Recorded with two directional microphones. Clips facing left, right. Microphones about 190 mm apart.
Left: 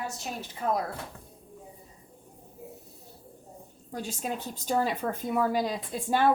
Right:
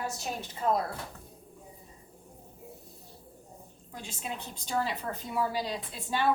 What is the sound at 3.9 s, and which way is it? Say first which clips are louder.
A woman's voice: left 6 dB; 40° left (ahead or behind).